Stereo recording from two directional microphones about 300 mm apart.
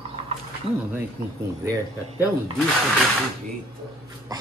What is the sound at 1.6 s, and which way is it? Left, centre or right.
Speech, centre.